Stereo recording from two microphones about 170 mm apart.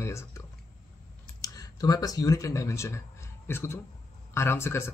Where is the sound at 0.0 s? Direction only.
15° left (ahead or behind).